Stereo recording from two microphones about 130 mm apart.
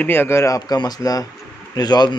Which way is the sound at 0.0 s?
15° left (ahead or behind).